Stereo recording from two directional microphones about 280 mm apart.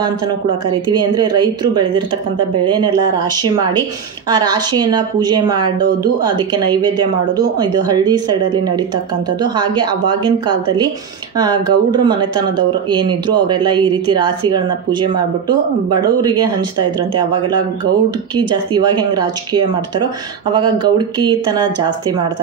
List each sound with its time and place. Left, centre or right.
0.7 s speech: centre